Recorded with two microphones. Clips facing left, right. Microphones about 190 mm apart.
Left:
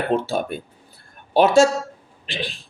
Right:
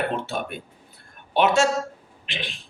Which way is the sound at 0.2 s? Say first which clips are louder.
Left 5 dB; 35° left (ahead or behind).